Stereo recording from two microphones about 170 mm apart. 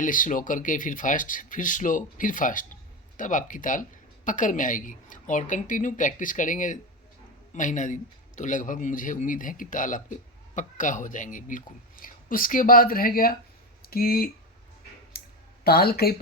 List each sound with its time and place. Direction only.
0.0 s a man's voice: 50° left (ahead or behind)
15.1 s a sound: 65° left (ahead or behind)
15.6 s speech: 65° left (ahead or behind)